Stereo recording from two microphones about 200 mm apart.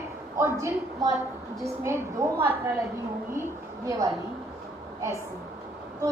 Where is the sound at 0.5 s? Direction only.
15° right (ahead or behind).